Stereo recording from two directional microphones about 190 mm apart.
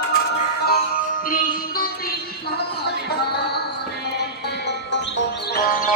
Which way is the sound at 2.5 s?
55° left (ahead or behind).